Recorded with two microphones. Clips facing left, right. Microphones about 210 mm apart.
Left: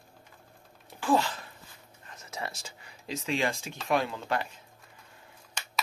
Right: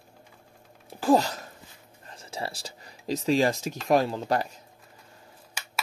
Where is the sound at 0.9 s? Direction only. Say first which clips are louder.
Right 5 dB; 40° right (ahead or behind).